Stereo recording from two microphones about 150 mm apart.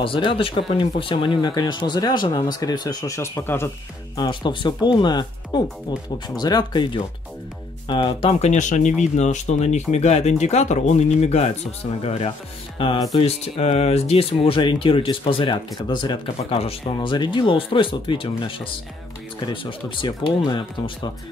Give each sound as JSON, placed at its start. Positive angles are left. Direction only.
{"t": 0.0, "sound": "speech", "side_deg": 35}
{"t": 4.2, "sound": "speech", "side_deg": 30}
{"t": 12.7, "sound": "music", "side_deg": 35}
{"t": 13.1, "sound": "speech", "side_deg": 40}
{"t": 19.4, "sound": "speech", "side_deg": 35}